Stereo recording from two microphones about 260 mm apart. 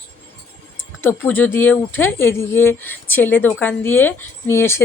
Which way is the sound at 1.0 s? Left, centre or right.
Centre.